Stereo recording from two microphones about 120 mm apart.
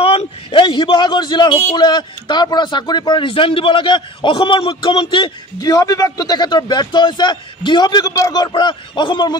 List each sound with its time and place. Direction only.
0.0 s a man's voice: 55° left (ahead or behind)
5.7 s a man's voice: 30° left (ahead or behind)